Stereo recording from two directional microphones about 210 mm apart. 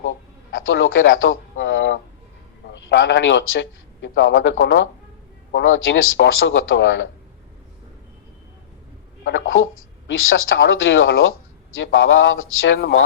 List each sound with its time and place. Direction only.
0.6 s a sound: 70° left (ahead or behind)
2.7 s a man's voice: 65° left (ahead or behind)
9.2 s speech: 65° left (ahead or behind)